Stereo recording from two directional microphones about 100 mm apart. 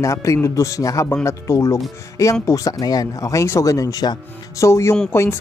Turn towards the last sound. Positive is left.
turn(degrees=25)  # may be behind; listen again after turning